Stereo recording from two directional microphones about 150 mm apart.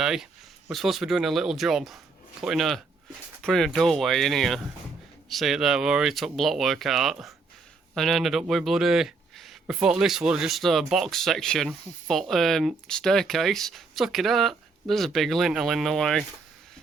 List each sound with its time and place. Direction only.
0.0 s a man's voice: 5° right (ahead or behind)